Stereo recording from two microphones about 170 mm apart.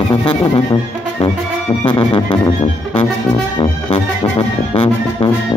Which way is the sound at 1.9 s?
30° left (ahead or behind).